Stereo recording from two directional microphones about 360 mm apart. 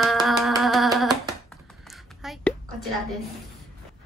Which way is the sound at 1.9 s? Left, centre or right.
Centre.